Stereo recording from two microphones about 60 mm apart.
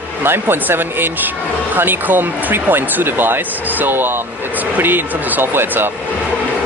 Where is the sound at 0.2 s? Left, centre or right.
Right.